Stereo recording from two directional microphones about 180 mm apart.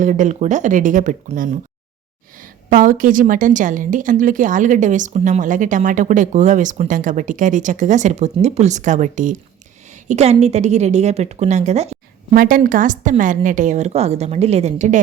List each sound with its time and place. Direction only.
0.0 s a woman's voice: 45° right (ahead or behind)
12.3 s a woman's voice: 50° right (ahead or behind)